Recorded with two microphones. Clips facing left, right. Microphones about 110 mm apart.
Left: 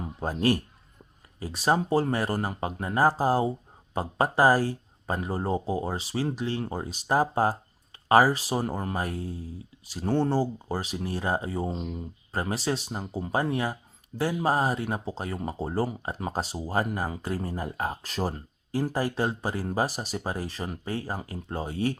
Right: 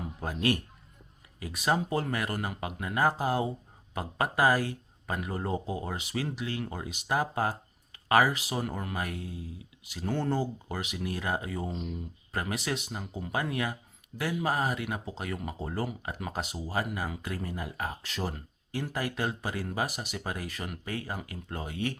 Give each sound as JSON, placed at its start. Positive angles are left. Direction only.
{"t": 0.2, "sound": "speech", "side_deg": 35}